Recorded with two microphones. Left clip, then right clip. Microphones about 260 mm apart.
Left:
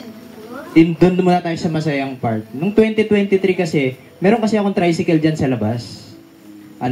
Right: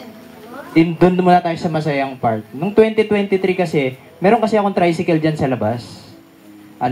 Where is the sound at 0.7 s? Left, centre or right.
Right.